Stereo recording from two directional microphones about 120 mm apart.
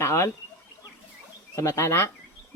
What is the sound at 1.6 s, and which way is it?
Speech, 25° left (ahead or behind).